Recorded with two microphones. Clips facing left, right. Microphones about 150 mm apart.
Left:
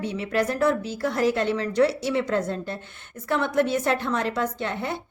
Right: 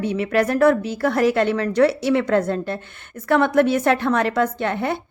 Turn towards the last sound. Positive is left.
turn(degrees=-60)  # may be behind; listen again after turning